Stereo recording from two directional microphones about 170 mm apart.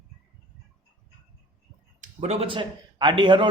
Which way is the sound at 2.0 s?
40° right (ahead or behind).